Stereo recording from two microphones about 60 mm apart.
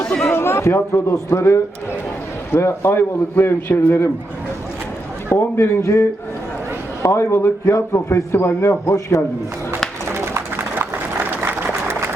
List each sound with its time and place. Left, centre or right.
0.3 s a man's voice: left
1.1 s a man's voice: left
5.3 s a man's voice: left
5.8 s a man's voice: left
8.9 s a man's voice: left
10.1 s a sound: right